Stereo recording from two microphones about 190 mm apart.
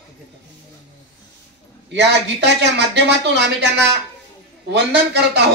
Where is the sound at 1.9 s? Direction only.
65° right (ahead or behind).